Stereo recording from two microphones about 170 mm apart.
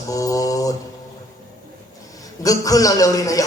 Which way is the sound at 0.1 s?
20° left (ahead or behind).